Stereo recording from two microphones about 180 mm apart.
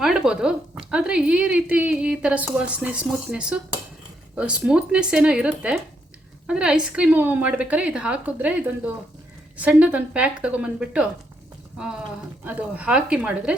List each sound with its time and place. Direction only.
0.0 s a woman's voice: 5° right (ahead or behind)